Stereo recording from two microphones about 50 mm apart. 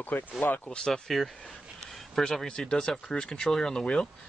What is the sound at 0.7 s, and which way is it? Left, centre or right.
Speech, centre.